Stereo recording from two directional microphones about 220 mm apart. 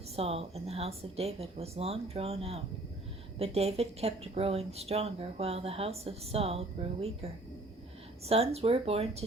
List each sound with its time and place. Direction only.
0.2 s speech: 25° right (ahead or behind)
8.3 s speech: 25° right (ahead or behind)